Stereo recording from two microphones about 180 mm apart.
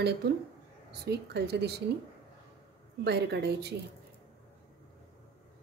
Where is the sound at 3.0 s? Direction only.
65° right (ahead or behind).